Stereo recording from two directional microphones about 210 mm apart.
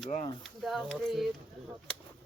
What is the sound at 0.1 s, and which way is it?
Speech, 30° left (ahead or behind).